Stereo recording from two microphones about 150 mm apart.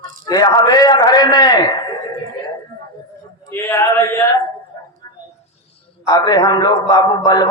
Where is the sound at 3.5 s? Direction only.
15° left (ahead or behind).